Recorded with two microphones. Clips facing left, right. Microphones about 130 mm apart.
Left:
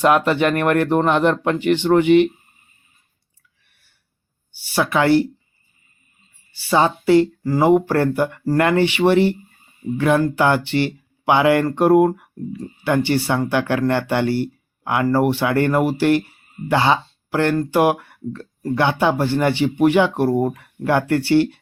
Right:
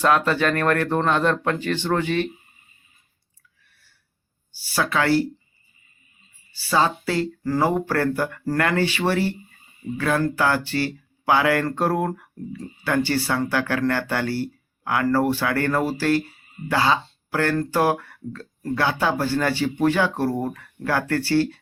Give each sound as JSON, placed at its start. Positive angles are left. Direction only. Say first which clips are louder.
{"t": 0.0, "sound": "speech", "louder": "left 4 dB", "side_deg": 20}
{"t": 4.7, "sound": "speech", "louder": "left 5 dB", "side_deg": 20}
{"t": 6.5, "sound": "speech", "louder": "left 4 dB", "side_deg": 20}